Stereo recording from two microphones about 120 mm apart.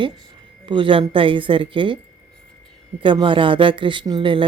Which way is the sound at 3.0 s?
45° right (ahead or behind).